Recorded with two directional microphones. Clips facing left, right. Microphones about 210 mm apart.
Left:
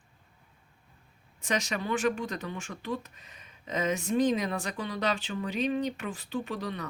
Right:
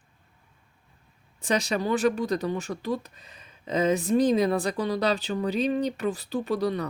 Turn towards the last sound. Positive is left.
turn(degrees=-35)  # may be behind; listen again after turning